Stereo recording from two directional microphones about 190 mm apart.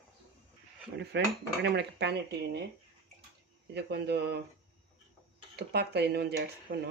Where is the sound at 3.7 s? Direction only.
60° right (ahead or behind).